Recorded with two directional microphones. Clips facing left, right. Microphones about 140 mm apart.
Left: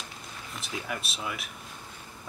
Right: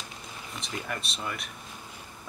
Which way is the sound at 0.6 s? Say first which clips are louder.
Even; 5° left (ahead or behind).